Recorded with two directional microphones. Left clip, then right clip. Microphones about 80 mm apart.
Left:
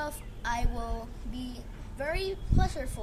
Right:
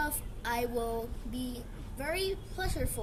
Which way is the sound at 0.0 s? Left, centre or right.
Left.